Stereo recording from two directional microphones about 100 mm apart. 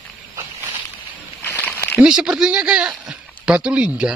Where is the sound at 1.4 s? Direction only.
20° left (ahead or behind).